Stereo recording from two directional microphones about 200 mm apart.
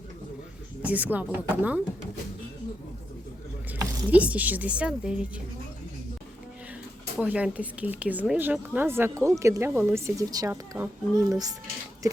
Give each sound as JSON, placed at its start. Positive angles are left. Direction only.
{"t": 0.8, "sound": "speech", "side_deg": -5}
{"t": 3.7, "sound": "speech", "side_deg": -10}
{"t": 7.2, "sound": "speech", "side_deg": -5}